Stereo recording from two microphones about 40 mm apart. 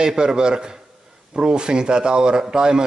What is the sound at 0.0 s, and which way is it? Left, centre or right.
A man's voice, centre.